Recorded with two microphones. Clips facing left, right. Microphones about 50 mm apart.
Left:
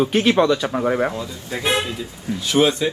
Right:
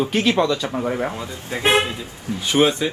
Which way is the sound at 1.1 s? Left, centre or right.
Right.